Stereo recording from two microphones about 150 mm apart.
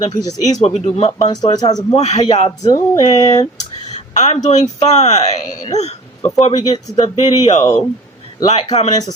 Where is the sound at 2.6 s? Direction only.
25° left (ahead or behind).